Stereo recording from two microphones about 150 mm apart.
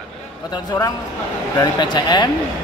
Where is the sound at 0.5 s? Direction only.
30° left (ahead or behind).